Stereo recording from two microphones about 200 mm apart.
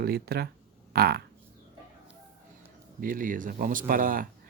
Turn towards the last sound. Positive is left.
turn(degrees=-45)  # may be behind; listen again after turning